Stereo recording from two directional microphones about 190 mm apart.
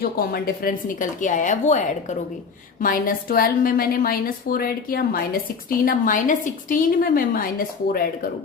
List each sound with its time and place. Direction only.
0.0 s a woman's voice: 50° left (ahead or behind)
2.8 s a woman's voice: 50° left (ahead or behind)